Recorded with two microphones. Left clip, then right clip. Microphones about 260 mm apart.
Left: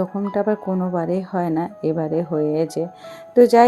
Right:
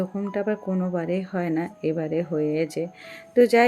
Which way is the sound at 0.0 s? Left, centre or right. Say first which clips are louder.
Left 6 dB; centre.